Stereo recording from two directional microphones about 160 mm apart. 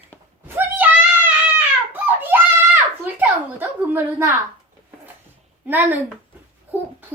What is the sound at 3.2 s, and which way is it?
A woman's voice, 15° right (ahead or behind).